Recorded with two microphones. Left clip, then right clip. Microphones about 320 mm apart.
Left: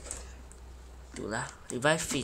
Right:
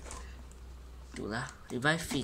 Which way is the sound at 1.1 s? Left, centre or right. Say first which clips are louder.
Left 2 dB; centre.